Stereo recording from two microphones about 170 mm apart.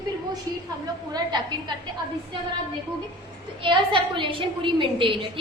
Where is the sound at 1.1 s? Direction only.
25° right (ahead or behind).